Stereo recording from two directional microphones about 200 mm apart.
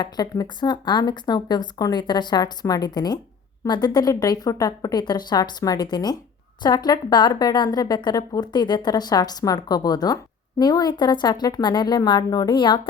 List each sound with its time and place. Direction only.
0.0 s a woman's voice: 20° left (ahead or behind)